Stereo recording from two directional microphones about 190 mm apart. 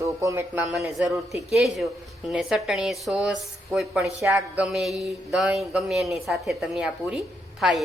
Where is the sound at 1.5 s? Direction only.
Centre (ahead or behind).